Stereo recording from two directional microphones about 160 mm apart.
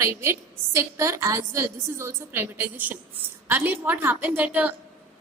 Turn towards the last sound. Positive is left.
turn(degrees=-10)  # may be behind; listen again after turning